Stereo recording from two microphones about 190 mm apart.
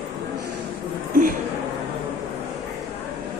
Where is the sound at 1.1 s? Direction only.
45° right (ahead or behind).